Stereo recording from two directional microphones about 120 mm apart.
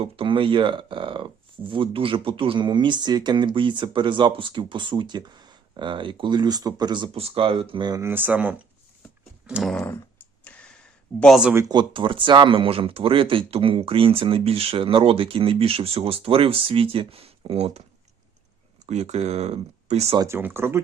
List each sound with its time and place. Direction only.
0.0 s speech: 45° right (ahead or behind)
8.0 s speech: 15° right (ahead or behind)
9.7 s clicking: 15° left (ahead or behind)
11.7 s speech: 40° right (ahead or behind); by 17.8 s 55° right (ahead or behind)
18.9 s speech: 70° right (ahead or behind)
20.2 s speech: 20° right (ahead or behind)